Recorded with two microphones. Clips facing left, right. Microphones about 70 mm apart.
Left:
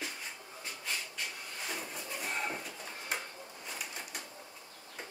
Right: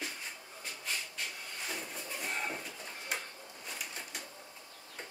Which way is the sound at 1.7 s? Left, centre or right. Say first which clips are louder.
Left 1 dB; centre.